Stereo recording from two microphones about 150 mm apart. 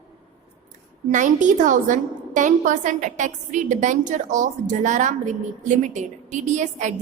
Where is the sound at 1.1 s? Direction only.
55° right (ahead or behind).